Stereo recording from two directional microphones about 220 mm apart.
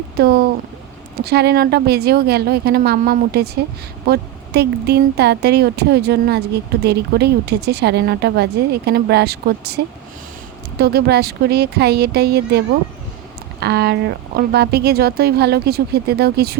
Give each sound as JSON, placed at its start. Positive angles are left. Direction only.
{"t": 0.2, "sound": "a woman's voice", "side_deg": -45}